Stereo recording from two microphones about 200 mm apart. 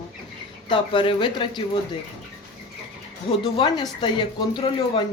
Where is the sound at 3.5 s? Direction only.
20° left (ahead or behind).